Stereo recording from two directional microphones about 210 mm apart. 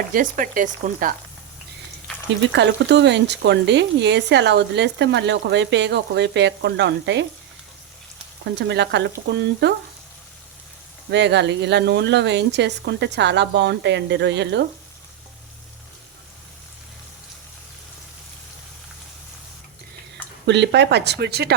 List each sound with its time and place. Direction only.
0.1 s frying: 40° right (ahead or behind)
2.5 s speech: 55° right (ahead or behind)
8.5 s speech: 55° right (ahead or behind)
11.1 s speech: 55° right (ahead or behind)
20.5 s speech: 55° right (ahead or behind)